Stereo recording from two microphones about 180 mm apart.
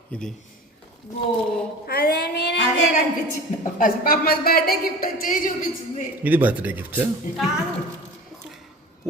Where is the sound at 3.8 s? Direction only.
55° left (ahead or behind).